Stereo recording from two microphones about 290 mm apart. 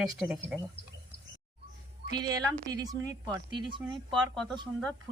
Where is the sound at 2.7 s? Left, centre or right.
Centre.